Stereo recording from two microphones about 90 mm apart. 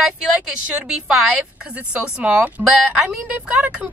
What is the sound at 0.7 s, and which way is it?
A woman's voice, 10° right (ahead or behind).